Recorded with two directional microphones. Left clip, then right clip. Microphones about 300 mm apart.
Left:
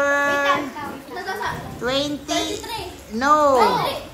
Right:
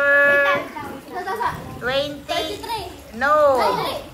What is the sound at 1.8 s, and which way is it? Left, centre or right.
Female singing, centre.